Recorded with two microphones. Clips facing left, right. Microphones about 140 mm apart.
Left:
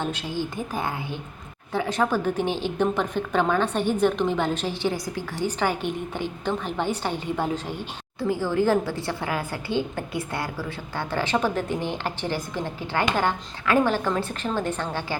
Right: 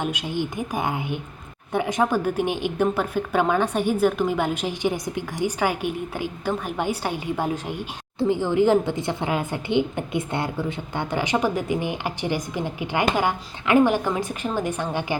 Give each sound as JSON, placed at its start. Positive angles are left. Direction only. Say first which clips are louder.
{"t": 0.0, "sound": "a woman's voice", "louder": "right 2 dB", "side_deg": -15}